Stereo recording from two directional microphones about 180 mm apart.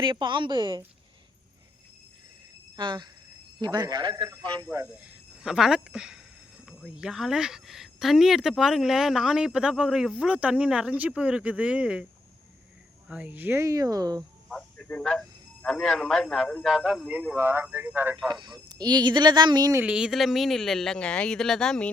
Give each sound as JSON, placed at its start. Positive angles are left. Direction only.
{"t": 0.0, "sound": "speech", "side_deg": -25}
{"t": 2.7, "sound": "a man's voice", "side_deg": -25}
{"t": 13.1, "sound": "a man's voice", "side_deg": -10}
{"t": 14.5, "sound": "speech", "side_deg": 5}
{"t": 18.3, "sound": "speech", "side_deg": -25}
{"t": 19.8, "sound": "speech", "side_deg": -5}